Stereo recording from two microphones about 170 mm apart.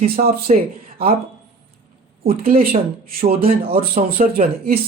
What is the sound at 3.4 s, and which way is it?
Speech, 35° right (ahead or behind).